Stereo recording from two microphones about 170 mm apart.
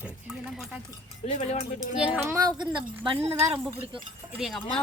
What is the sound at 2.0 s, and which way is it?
Speech, 15° right (ahead or behind).